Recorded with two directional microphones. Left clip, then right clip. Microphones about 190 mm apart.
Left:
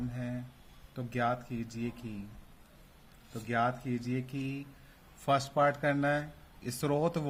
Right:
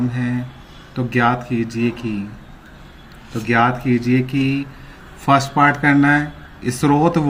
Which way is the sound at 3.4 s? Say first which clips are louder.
Right 16 dB; 35° left (ahead or behind).